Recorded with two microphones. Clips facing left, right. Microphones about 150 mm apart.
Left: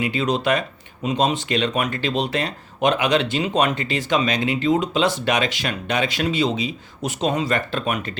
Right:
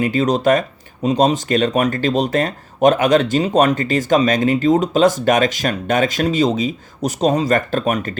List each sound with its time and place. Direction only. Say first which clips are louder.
0.0 s speech: right 6 dB; 45° right (ahead or behind)